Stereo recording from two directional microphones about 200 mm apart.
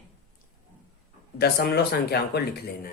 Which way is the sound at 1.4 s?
55° left (ahead or behind).